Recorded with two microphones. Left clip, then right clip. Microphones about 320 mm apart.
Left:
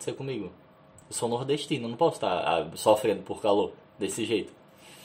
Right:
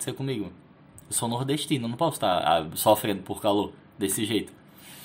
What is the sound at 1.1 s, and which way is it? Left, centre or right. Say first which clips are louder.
Speech: left 1 dB; right.